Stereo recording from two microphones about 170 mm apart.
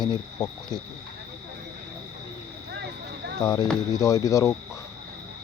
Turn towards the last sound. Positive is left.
turn(degrees=20)  # may be behind; listen again after turning